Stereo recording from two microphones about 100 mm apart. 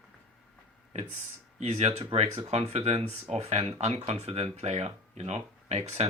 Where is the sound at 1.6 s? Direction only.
90° right.